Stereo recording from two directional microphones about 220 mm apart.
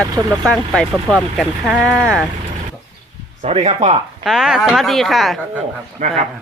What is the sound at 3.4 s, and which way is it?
Speech, 30° right (ahead or behind).